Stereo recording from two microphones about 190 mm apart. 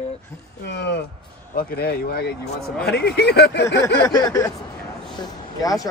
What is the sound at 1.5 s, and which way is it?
Speech, 50° left (ahead or behind).